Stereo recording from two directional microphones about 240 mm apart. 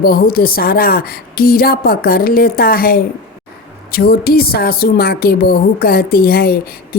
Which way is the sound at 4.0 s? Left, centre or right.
Left.